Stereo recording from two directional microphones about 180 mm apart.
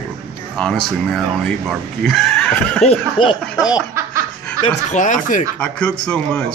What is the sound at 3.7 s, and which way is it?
Laughter, 15° right (ahead or behind).